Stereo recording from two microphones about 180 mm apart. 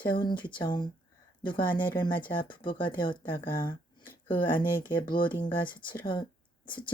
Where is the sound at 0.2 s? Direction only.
25° left (ahead or behind).